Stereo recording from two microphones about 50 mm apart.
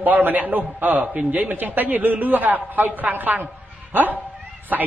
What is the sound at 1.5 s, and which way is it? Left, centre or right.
A man's voice, right.